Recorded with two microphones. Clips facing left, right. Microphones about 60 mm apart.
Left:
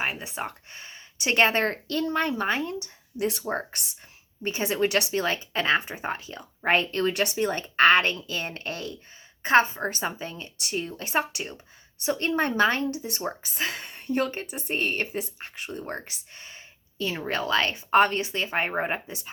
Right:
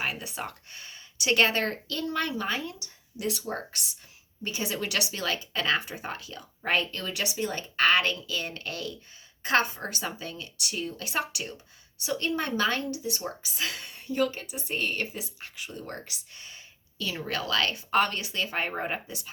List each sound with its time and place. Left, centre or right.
0.0 s speech: left
13.0 s speech: left